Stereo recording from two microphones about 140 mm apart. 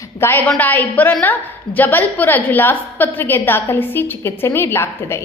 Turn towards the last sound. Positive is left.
turn(degrees=20)  # may be behind; listen again after turning